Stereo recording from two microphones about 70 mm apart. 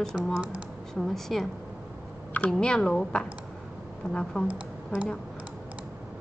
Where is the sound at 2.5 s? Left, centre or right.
Centre.